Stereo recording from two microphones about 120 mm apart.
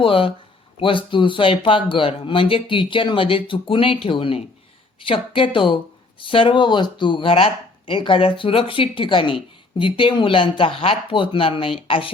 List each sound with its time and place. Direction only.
0.0 s speech: 45° left (ahead or behind)